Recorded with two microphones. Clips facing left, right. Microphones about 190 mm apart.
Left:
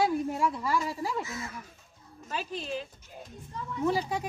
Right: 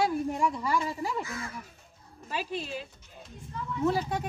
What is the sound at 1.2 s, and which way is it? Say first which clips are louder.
Speech: even; 20° left (ahead or behind).